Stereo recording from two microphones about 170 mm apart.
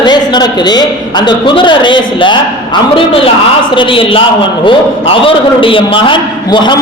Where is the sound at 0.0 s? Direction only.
25° left (ahead or behind).